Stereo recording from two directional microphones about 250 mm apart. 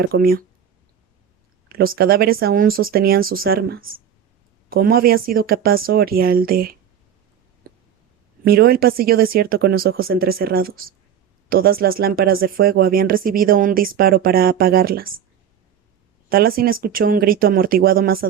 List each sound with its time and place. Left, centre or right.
0.0 s speech: right
1.7 s speech: right
8.4 s speech: right
16.6 s speech: right